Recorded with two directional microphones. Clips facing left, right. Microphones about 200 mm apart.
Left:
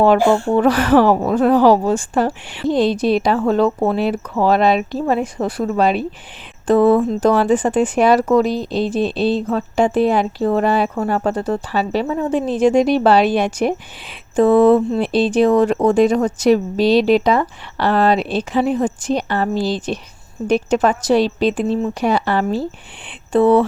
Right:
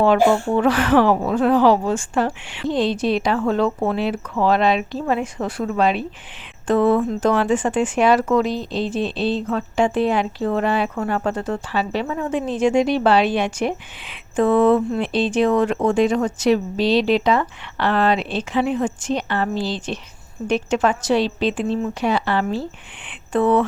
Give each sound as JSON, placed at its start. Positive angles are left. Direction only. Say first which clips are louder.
{"t": 0.0, "sound": "speech", "louder": "left 2 dB", "side_deg": 40}